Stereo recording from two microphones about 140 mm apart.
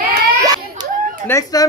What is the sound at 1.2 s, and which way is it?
Speech, 20° left (ahead or behind).